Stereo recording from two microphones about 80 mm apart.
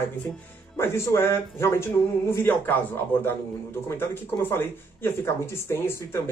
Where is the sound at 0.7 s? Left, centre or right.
Left.